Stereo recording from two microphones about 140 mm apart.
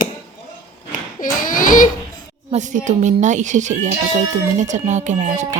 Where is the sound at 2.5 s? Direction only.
60° right (ahead or behind).